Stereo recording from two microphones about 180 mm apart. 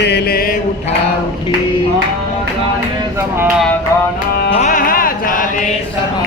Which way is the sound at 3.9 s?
15° left (ahead or behind).